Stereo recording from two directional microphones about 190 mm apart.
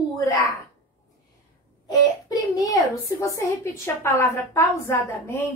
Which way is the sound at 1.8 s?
20° left (ahead or behind).